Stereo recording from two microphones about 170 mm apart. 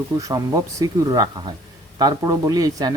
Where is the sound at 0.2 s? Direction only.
20° right (ahead or behind).